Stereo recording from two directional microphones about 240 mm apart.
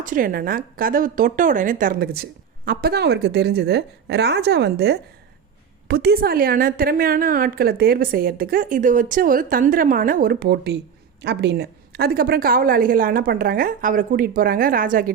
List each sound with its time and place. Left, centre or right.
0.0 s a woman's voice: right